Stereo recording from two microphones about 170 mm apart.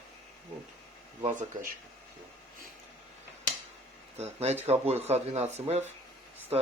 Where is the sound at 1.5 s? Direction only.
50° right (ahead or behind).